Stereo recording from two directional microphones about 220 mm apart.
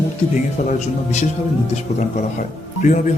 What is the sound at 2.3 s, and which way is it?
Music, 35° left (ahead or behind).